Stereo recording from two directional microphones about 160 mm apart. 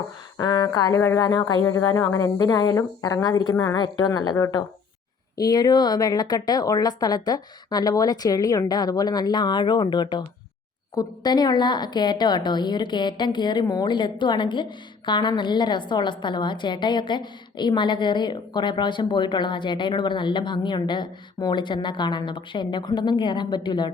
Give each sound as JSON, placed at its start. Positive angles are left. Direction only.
{"t": 0.3, "sound": "a woman's voice", "side_deg": 25}